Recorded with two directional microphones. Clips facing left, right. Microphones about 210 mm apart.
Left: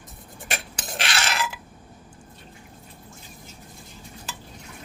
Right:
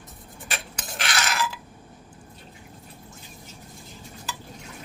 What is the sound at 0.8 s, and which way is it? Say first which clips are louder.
Filing: even; 25° left (ahead or behind).